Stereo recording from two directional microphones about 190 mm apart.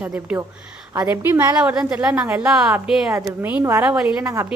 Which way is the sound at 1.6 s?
5° right (ahead or behind).